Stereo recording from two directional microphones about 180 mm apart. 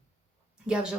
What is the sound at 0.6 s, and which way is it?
Speech, 5° right (ahead or behind).